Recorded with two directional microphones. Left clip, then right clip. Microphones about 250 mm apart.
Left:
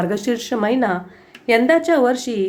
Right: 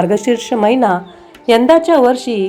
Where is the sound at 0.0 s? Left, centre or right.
Centre.